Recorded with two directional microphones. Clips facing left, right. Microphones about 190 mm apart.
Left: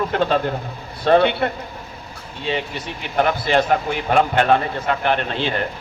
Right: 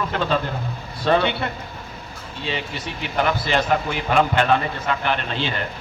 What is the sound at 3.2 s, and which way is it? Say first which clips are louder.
A man's voice: left 3 dB; 50° left (ahead or behind).